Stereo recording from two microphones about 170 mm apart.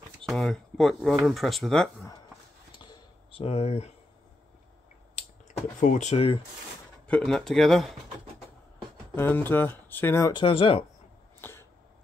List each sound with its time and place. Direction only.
0.2 s speech: centre (ahead or behind)
2.8 s a sound: 30° left (ahead or behind)
5.8 s speech: 45° left (ahead or behind)
7.1 s speech: 5° left (ahead or behind)
9.1 s speech: 10° left (ahead or behind)
10.3 s speech: 30° left (ahead or behind)
11.4 s a sound: 15° left (ahead or behind)